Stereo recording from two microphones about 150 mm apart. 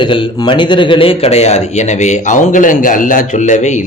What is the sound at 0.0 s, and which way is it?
Speech, 30° left (ahead or behind).